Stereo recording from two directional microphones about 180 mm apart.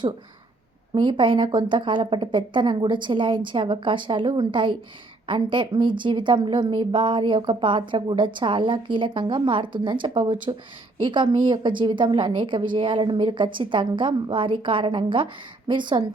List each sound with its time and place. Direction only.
0.9 s a woman's voice: 25° right (ahead or behind)